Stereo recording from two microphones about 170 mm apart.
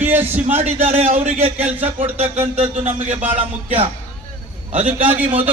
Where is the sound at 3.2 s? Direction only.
10° right (ahead or behind).